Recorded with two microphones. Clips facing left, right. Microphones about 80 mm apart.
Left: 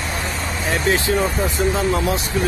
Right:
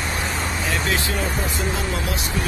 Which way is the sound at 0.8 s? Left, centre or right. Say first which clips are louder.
Left 5 dB; left.